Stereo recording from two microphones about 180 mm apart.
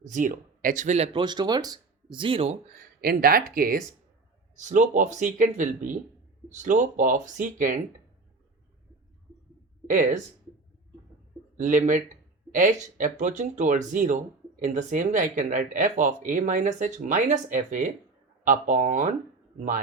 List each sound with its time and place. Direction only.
0.0 s speech: 45° right (ahead or behind)
1.2 s speech: 25° right (ahead or behind)
3.0 s speech: 55° right (ahead or behind)
9.8 s speech: 45° right (ahead or behind)
11.5 s speech: 45° right (ahead or behind)